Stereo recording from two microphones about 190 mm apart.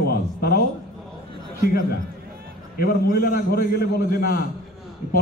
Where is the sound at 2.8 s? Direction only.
50° left (ahead or behind).